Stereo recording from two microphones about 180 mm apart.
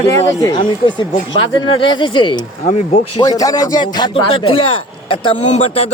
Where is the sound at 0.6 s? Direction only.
25° left (ahead or behind).